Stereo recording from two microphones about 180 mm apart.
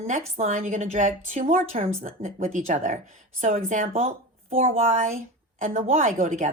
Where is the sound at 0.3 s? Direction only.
40° right (ahead or behind).